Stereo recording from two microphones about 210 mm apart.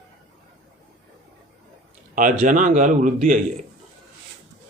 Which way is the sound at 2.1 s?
40° right (ahead or behind).